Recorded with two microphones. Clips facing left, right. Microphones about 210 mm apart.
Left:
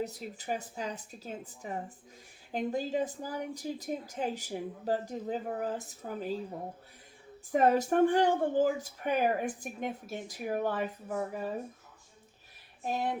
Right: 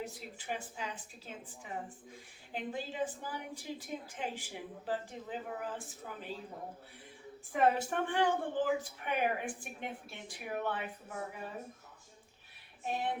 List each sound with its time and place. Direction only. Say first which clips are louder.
0.0 s speech: left 6 dB; 40° left (ahead or behind)
7.5 s speech: left 5 dB; 40° left (ahead or behind)
12.8 s speech: left 3 dB; 40° left (ahead or behind)